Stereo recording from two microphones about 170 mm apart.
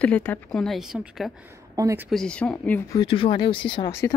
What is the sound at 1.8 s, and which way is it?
Speech, 20° right (ahead or behind).